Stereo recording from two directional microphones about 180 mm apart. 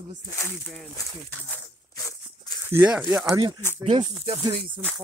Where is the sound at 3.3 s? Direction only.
20° right (ahead or behind).